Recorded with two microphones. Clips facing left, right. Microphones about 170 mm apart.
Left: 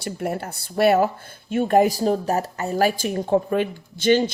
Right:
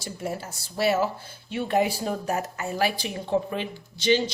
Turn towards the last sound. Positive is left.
turn(degrees=50)  # may be behind; listen again after turning